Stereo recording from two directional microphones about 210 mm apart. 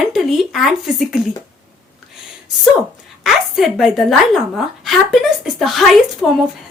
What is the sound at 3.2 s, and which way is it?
A woman's voice, centre (ahead or behind).